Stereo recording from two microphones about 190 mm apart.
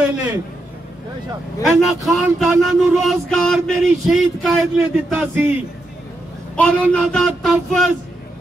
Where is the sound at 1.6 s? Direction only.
Centre (ahead or behind).